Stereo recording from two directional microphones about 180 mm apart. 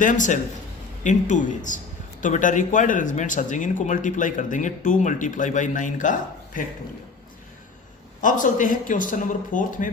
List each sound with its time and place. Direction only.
0.0 s speech: 45° left (ahead or behind)
8.2 s speech: 45° left (ahead or behind)